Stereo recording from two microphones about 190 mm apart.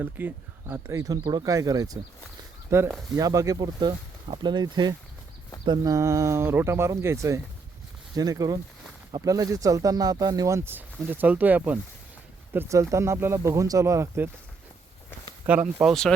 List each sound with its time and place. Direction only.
0.0 s speech: 10° right (ahead or behind)
15.5 s speech: 10° right (ahead or behind)
15.8 s speech: centre (ahead or behind)